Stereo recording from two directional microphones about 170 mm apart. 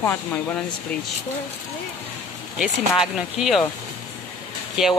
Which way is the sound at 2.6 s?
5° right (ahead or behind).